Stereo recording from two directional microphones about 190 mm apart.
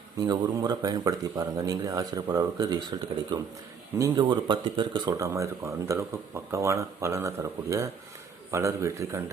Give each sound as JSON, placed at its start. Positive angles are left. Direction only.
{"t": 0.2, "sound": "a man's voice", "side_deg": -20}